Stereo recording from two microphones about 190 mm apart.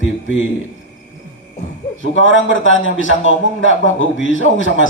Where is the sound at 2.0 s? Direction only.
90° left.